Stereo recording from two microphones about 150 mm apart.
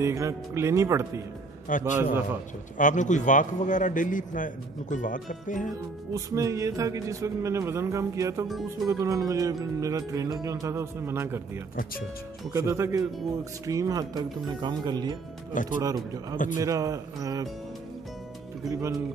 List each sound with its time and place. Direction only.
0.0 s music: 20° right (ahead or behind)
1.7 s a man's voice: 60° left (ahead or behind)
6.1 s music: 20° right (ahead or behind)
18.7 s music: 20° right (ahead or behind)